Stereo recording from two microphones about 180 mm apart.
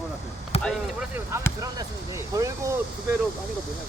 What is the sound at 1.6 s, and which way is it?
Speech, 20° right (ahead or behind).